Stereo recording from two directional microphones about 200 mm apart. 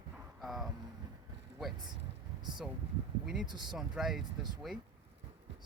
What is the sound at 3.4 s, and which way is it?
Speech, 20° right (ahead or behind).